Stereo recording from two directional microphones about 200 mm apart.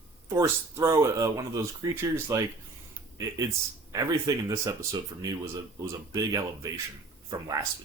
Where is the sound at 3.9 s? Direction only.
15° right (ahead or behind).